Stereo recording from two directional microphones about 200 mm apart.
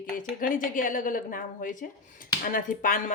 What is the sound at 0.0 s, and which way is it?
A woman's voice, 45° left (ahead or behind).